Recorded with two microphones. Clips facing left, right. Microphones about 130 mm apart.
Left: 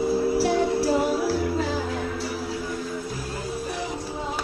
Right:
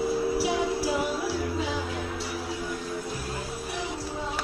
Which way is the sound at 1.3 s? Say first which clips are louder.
Left 4 dB; centre (ahead or behind).